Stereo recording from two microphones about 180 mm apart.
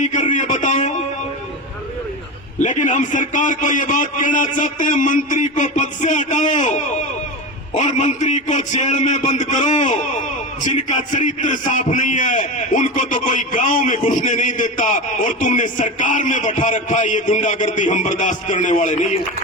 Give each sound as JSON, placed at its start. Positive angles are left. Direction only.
{"t": 0.0, "sound": "a man's voice", "side_deg": 45}
{"t": 2.6, "sound": "a man's voice", "side_deg": 45}